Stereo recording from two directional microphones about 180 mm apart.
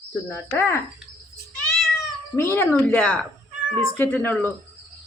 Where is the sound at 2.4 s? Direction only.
15° left (ahead or behind).